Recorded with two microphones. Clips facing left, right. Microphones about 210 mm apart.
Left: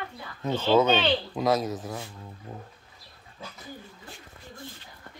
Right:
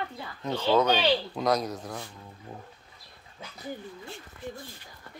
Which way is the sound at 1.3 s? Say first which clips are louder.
Left 2 dB; 5° left (ahead or behind).